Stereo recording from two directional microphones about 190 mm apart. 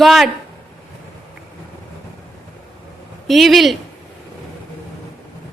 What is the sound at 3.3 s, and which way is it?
Speech, centre (ahead or behind).